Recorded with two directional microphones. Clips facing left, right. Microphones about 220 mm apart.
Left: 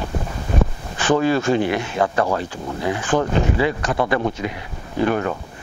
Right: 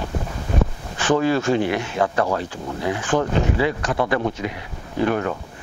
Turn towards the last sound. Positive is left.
turn(degrees=25)  # may be behind; listen again after turning